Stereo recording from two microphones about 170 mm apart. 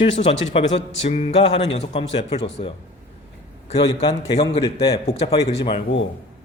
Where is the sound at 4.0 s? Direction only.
35° left (ahead or behind).